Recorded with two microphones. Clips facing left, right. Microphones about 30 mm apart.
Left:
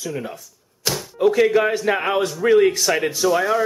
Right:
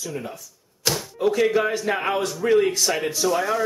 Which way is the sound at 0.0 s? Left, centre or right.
Centre.